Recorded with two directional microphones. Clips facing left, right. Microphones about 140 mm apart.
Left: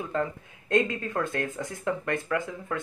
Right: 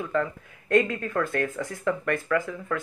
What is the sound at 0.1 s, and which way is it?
Speech, 25° left (ahead or behind).